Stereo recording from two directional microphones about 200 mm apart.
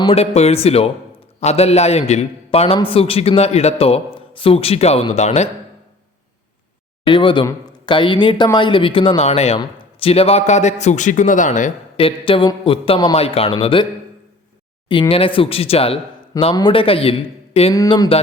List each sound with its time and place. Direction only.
0.0 s a man's voice: 30° left (ahead or behind)
7.0 s a man's voice: 25° left (ahead or behind)
15.1 s a man's voice: 25° left (ahead or behind)